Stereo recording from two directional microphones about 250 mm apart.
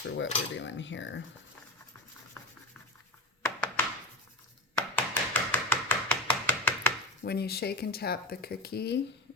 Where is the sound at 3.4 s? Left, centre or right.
Centre.